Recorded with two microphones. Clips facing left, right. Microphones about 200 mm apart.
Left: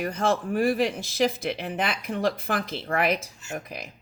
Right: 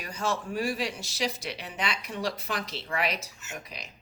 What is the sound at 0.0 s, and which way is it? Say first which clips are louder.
Speech: left 7 dB; 55° left (ahead or behind).